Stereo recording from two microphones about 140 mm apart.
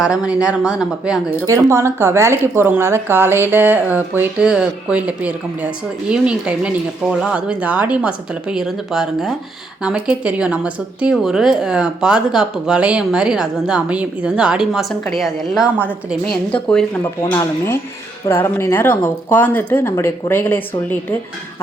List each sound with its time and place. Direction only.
0.0 s a woman's voice: 5° right (ahead or behind)
1.5 s a woman's voice: 20° right (ahead or behind); by 21.2 s 15° left (ahead or behind)